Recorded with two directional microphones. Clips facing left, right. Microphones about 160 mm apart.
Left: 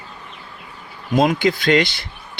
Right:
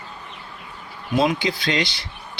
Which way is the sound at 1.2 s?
50° left (ahead or behind).